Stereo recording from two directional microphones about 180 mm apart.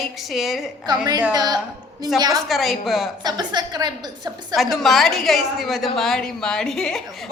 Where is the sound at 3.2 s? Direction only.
25° right (ahead or behind).